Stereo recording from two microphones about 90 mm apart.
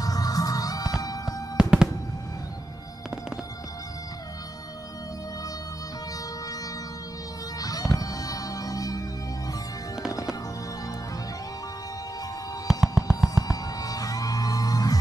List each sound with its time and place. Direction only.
0.0 s music: 45° left (ahead or behind)
1.6 s fireworks: 10° right (ahead or behind)
7.6 s music: 45° left (ahead or behind)
12.6 s music: 5° right (ahead or behind)
13.4 s music: 45° left (ahead or behind)